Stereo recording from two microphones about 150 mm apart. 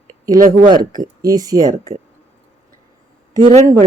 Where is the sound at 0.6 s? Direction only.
30° right (ahead or behind).